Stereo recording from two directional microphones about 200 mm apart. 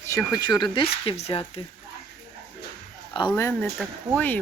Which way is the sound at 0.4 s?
20° left (ahead or behind).